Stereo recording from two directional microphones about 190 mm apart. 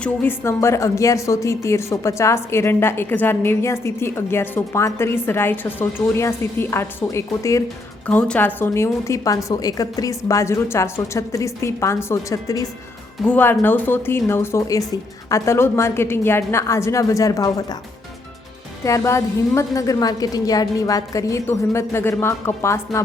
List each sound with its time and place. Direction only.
0.0 s a woman's voice: 10° left (ahead or behind)
18.9 s a woman's voice: 15° left (ahead or behind)